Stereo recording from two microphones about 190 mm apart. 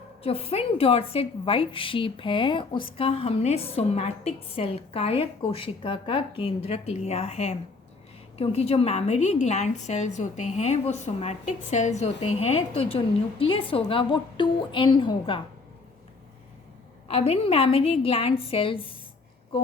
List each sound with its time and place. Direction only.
0.2 s a woman's voice: 30° left (ahead or behind)
17.1 s a woman's voice: 35° left (ahead or behind)